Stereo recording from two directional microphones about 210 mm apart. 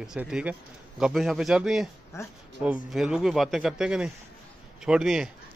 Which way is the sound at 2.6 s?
5° right (ahead or behind).